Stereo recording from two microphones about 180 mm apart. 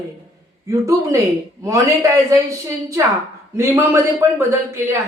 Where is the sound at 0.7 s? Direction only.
15° right (ahead or behind).